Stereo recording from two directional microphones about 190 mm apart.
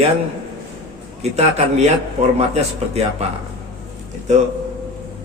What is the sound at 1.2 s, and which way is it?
A man's voice, 35° right (ahead or behind).